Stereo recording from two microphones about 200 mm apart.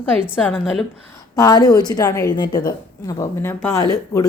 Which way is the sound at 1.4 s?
20° left (ahead or behind).